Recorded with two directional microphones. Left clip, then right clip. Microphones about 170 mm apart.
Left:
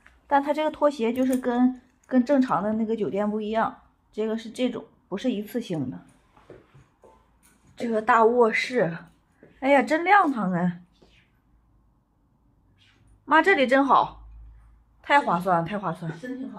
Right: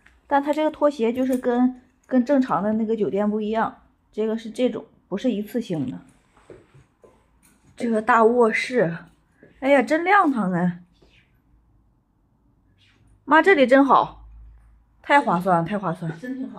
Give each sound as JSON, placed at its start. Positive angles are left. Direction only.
{"t": 0.3, "sound": "speech", "side_deg": 5}
{"t": 7.7, "sound": "a woman's voice", "side_deg": 10}
{"t": 13.2, "sound": "speech", "side_deg": 0}